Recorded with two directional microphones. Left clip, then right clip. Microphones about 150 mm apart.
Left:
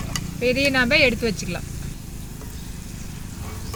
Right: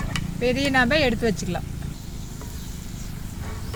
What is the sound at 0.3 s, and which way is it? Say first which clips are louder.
Speech: left 1 dB; 65° right (ahead or behind).